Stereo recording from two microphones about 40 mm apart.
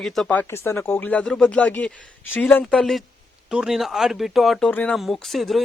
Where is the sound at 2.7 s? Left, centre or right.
Centre.